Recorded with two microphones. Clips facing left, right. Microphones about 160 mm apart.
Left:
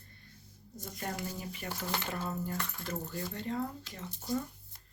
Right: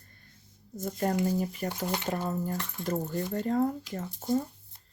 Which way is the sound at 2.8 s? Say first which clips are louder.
Right 7 dB; 45° right (ahead or behind).